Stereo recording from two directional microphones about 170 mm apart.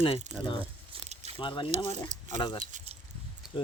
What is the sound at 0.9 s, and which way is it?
Biting, 30° right (ahead or behind).